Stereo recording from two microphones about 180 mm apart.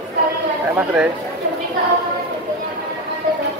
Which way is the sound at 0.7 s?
10° right (ahead or behind).